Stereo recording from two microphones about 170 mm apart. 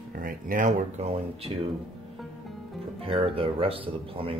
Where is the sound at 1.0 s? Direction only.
35° right (ahead or behind).